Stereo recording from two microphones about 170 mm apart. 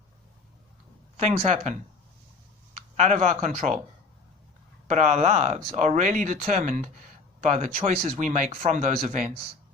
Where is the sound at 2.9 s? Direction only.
40° right (ahead or behind).